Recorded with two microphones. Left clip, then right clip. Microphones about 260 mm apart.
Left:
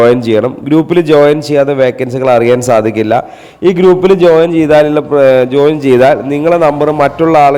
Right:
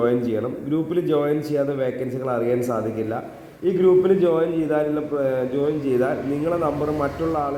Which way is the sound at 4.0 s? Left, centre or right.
Left.